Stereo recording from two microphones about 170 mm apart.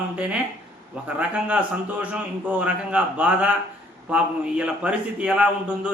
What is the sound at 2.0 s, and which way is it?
A man's voice, 10° right (ahead or behind).